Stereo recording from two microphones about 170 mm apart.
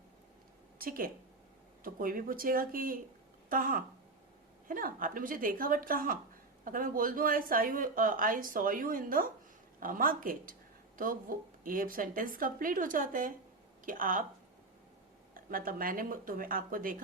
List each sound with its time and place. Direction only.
0.8 s speech: 55° right (ahead or behind)
15.4 s speech: 55° right (ahead or behind)